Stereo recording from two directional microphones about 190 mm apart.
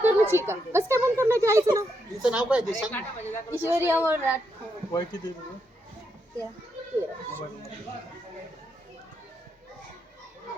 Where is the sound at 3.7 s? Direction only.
10° right (ahead or behind).